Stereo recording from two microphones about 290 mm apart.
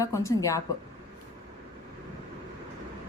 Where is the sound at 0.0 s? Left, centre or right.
Centre.